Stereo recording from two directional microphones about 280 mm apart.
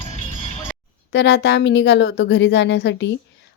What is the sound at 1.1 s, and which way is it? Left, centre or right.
Speech, left.